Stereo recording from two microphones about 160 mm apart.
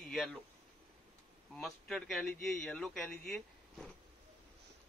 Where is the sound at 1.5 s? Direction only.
5° left (ahead or behind).